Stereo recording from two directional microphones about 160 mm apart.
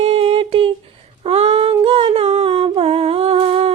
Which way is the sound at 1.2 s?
35° right (ahead or behind).